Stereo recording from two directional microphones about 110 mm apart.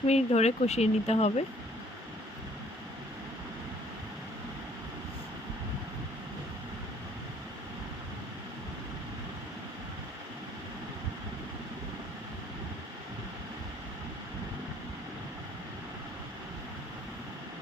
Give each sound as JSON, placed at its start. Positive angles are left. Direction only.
{"t": 0.1, "sound": "speech", "side_deg": 75}